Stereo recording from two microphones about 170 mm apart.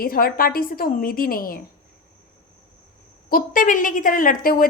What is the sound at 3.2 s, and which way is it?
A woman's voice, 55° left (ahead or behind).